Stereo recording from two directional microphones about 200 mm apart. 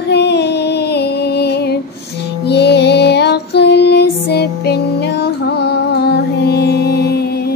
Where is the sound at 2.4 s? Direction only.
55° left (ahead or behind).